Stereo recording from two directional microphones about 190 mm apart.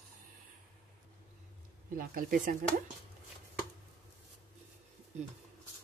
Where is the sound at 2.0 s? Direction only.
50° right (ahead or behind).